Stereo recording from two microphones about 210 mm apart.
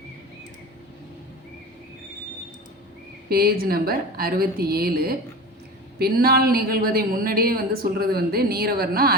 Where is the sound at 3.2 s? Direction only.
45° right (ahead or behind).